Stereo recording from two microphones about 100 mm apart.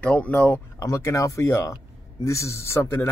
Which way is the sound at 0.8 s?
30° left (ahead or behind).